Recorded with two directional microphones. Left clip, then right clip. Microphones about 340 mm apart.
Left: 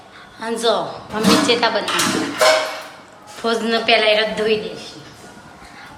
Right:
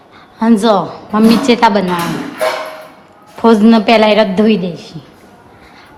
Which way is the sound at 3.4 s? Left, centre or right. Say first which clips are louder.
Right 9 dB; centre.